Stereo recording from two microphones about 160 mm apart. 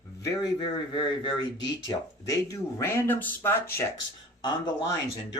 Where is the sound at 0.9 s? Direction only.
30° left (ahead or behind); by 3.8 s 10° left (ahead or behind).